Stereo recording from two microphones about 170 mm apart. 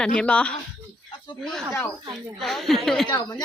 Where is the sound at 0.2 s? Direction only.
5° left (ahead or behind).